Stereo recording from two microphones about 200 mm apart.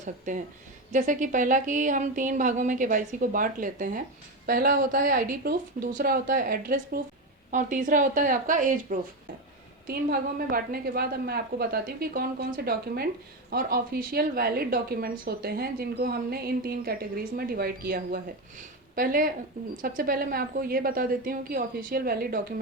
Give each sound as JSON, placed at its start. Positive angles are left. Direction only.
{"t": 0.0, "sound": "a woman's voice", "side_deg": -40}